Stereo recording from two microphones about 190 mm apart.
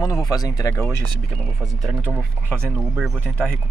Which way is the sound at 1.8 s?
Centre (ahead or behind).